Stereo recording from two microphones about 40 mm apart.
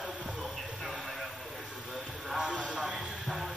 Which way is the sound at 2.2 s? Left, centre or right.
Centre.